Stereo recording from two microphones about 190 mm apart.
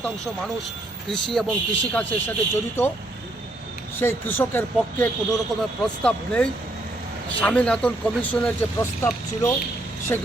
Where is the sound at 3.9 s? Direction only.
10° left (ahead or behind).